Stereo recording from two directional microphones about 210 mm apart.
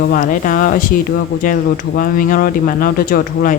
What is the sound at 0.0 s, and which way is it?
A woman's voice, 40° left (ahead or behind).